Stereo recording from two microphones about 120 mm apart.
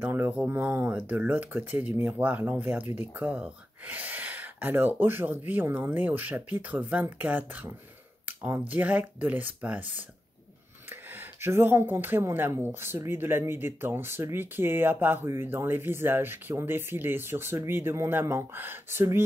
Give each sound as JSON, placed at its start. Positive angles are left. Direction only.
{"t": 0.0, "sound": "speech", "side_deg": -15}
{"t": 11.1, "sound": "speech", "side_deg": -20}